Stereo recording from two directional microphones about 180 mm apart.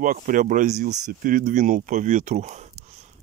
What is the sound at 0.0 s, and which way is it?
Speech, 50° right (ahead or behind).